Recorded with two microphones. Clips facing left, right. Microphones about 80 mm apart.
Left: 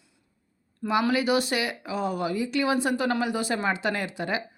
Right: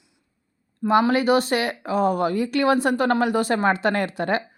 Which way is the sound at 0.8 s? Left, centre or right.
Right.